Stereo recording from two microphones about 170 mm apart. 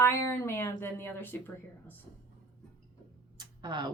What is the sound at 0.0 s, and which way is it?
Speech, 15° left (ahead or behind).